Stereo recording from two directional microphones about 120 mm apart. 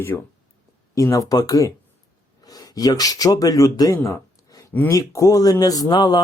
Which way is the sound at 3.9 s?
25° left (ahead or behind).